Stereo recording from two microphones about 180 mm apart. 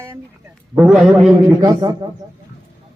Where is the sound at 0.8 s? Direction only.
Centre (ahead or behind).